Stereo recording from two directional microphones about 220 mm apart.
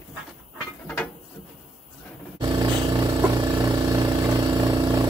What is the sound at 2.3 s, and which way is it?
Vehicle, 15° right (ahead or behind).